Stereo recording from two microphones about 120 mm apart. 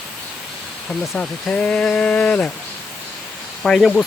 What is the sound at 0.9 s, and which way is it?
Speech, 10° left (ahead or behind).